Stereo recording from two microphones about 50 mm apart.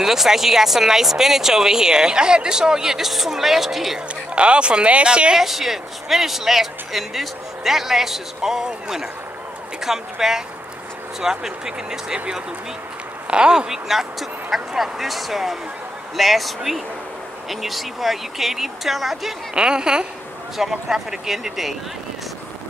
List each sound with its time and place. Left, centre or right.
0.0 s speech: centre
4.4 s speech: right
5.4 s speech: centre
19.5 s speech: centre